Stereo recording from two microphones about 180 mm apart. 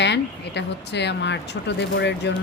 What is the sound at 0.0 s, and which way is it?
Speech, 70° left (ahead or behind).